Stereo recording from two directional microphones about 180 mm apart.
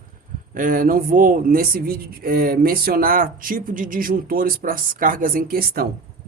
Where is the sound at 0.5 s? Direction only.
50° right (ahead or behind).